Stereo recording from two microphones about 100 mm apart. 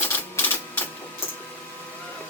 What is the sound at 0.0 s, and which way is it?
Printer, 20° left (ahead or behind).